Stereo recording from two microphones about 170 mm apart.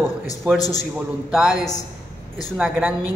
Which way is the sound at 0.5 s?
20° left (ahead or behind).